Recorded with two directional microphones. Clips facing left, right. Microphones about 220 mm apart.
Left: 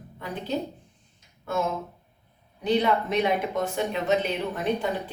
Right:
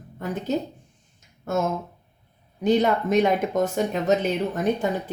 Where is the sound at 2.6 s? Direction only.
45° right (ahead or behind).